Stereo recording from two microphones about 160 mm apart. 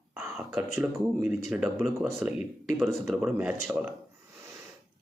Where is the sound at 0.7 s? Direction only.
15° right (ahead or behind).